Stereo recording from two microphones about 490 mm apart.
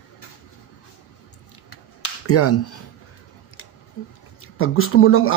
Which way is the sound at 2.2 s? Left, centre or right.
Left.